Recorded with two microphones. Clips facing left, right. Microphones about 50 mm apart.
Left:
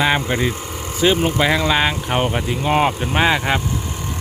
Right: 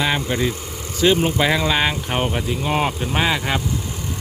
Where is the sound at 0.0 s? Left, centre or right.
Left.